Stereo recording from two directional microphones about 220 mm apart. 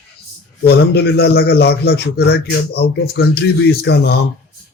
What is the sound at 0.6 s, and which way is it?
A man's voice, 45° left (ahead or behind).